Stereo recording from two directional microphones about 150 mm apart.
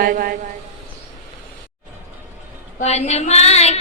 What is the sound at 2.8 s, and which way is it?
Female singing, 45° left (ahead or behind).